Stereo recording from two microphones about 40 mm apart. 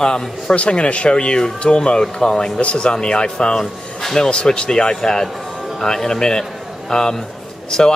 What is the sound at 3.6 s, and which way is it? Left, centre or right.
Speech, centre.